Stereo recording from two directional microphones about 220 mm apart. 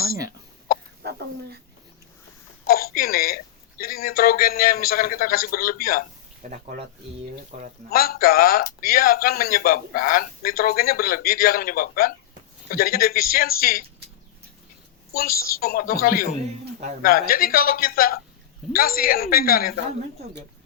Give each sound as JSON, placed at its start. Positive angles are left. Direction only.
{"t": 0.7, "sound": "chicken", "side_deg": 40}
{"t": 2.6, "sound": "speech", "side_deg": 40}
{"t": 6.4, "sound": "speech", "side_deg": -35}
{"t": 7.9, "sound": "a man's voice", "side_deg": 45}
{"t": 15.1, "sound": "a man's voice", "side_deg": 40}